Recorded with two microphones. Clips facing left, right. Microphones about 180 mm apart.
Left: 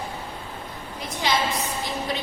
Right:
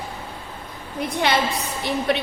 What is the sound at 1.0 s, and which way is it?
A woman's voice, 60° right (ahead or behind).